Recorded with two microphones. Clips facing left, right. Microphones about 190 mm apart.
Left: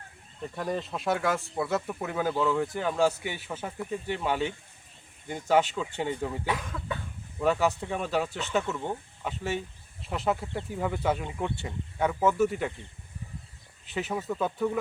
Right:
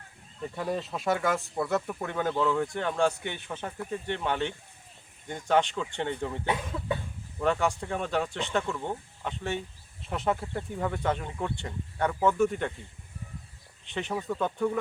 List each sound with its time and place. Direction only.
0.4 s speech: 5° right (ahead or behind)
6.5 s cough: 25° right (ahead or behind)
7.3 s speech: 5° left (ahead or behind)
13.8 s speech: 5° left (ahead or behind)